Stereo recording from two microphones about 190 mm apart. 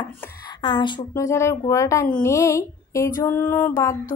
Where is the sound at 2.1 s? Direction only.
15° left (ahead or behind).